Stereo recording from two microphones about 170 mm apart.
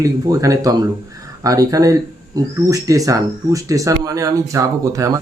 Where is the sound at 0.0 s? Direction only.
20° right (ahead or behind).